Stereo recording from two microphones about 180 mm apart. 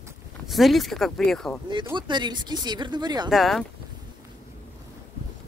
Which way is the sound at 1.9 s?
25° right (ahead or behind).